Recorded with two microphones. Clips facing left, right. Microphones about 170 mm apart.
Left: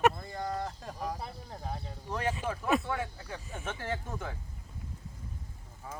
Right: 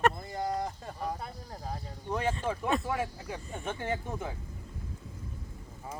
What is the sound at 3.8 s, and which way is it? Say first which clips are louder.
Speech: right 3 dB; 20° right (ahead or behind).